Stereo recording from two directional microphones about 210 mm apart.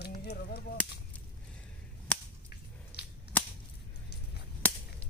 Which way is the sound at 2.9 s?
50° left (ahead or behind).